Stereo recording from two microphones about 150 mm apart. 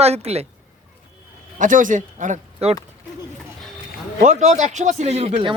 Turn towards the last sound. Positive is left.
turn(degrees=-45)  # may be behind; listen again after turning